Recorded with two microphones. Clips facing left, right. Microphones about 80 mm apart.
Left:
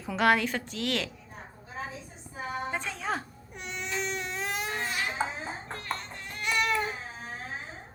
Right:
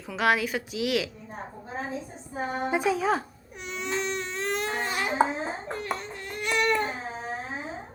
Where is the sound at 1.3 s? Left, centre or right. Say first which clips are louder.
Right 7 dB; right.